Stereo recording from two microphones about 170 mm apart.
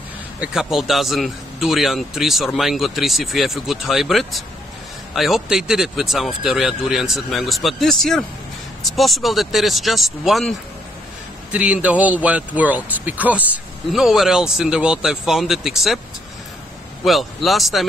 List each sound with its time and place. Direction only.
0.4 s a man's voice: 5° right (ahead or behind)
11.5 s a man's voice: 5° right (ahead or behind)
17.0 s a man's voice: centre (ahead or behind)